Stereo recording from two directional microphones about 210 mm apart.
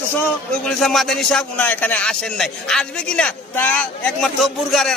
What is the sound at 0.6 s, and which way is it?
A man's voice, centre (ahead or behind).